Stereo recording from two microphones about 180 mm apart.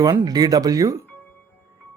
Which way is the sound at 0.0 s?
20° right (ahead or behind).